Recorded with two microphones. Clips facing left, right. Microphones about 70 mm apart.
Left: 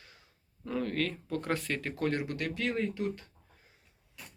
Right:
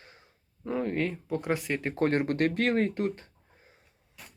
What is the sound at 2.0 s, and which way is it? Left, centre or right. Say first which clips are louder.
Speech: right 8 dB; right.